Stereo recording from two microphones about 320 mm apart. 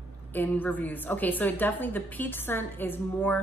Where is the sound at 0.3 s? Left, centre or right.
Centre.